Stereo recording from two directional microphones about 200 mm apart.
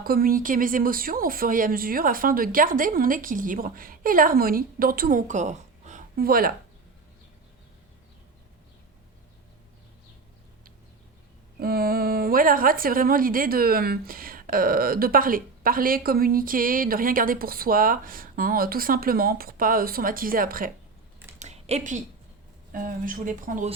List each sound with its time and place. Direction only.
0.0 s speech: 45° right (ahead or behind)
11.6 s speech: 50° right (ahead or behind)
21.3 s a sound: 35° right (ahead or behind)
22.7 s speech: 45° right (ahead or behind)